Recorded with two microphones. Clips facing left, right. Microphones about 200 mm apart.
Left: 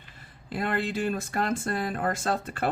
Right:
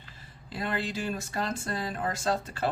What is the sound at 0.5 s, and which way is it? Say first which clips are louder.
Speech: left 4 dB; 55° left (ahead or behind).